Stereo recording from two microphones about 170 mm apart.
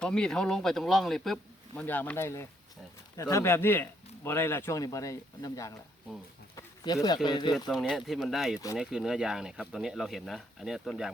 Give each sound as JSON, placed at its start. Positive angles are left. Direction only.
{"t": 0.0, "sound": "speech", "side_deg": 5}
{"t": 6.6, "sound": "a sound", "side_deg": 20}
{"t": 7.3, "sound": "speech", "side_deg": 25}
{"t": 7.7, "sound": "speech", "side_deg": 0}